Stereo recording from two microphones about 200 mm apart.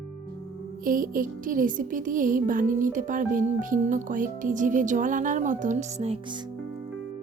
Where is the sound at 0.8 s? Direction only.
45° right (ahead or behind); by 6.4 s 25° right (ahead or behind).